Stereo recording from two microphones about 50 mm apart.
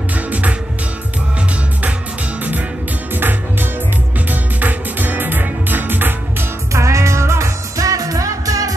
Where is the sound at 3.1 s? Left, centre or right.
Right.